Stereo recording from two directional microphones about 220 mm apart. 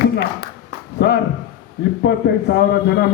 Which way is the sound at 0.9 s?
50° left (ahead or behind).